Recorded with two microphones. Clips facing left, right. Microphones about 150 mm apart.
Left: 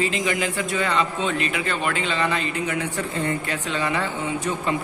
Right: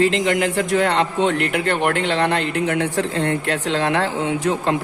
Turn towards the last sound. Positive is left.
turn(degrees=-90)